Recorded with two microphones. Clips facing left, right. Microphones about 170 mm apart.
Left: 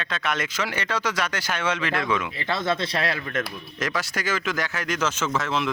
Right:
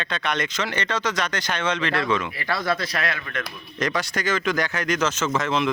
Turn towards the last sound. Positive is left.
turn(degrees=5)  # may be behind; listen again after turning